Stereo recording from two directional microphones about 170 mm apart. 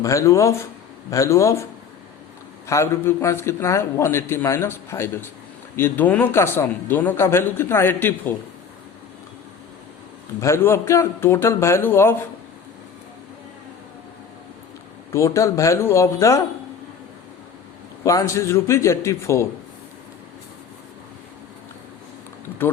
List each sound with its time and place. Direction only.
0.0 s a man's voice: 20° left (ahead or behind)
2.6 s a man's voice: 15° left (ahead or behind)
10.4 s a man's voice: 15° left (ahead or behind)
15.1 s a man's voice: 15° left (ahead or behind)
18.0 s a man's voice: 20° left (ahead or behind)